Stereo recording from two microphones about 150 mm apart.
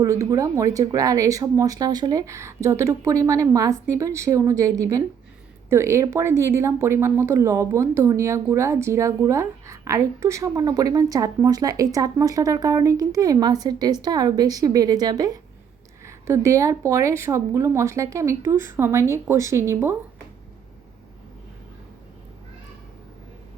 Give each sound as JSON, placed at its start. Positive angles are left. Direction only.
{"t": 0.0, "sound": "speech", "side_deg": -20}